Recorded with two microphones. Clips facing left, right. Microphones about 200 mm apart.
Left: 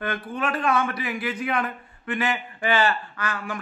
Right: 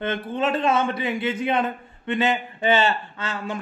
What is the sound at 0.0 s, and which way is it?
Speech, 25° right (ahead or behind).